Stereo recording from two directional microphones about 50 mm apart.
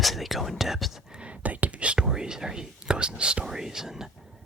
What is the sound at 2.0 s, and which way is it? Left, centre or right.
Speech, centre.